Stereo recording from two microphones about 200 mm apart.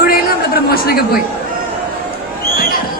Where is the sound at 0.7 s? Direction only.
50° left (ahead or behind).